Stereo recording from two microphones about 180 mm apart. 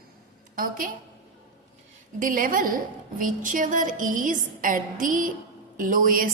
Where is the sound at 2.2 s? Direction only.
50° right (ahead or behind).